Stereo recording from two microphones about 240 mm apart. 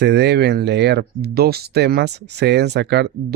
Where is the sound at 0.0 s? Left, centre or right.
Right.